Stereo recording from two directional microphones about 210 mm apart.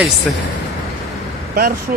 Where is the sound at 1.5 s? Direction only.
45° right (ahead or behind).